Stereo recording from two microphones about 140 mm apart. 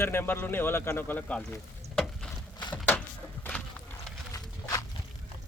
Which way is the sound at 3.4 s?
10° left (ahead or behind).